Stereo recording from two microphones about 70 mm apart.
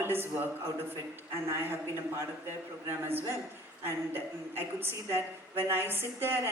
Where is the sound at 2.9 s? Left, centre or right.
Right.